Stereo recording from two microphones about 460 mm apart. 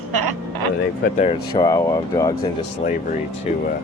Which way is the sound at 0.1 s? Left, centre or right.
Right.